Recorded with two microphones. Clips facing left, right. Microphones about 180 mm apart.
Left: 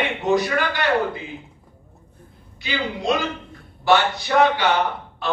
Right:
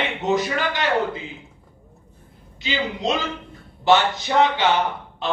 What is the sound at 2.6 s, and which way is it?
A man's voice, 20° right (ahead or behind).